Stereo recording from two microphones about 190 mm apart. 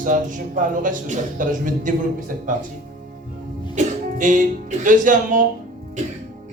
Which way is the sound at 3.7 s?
45° right (ahead or behind).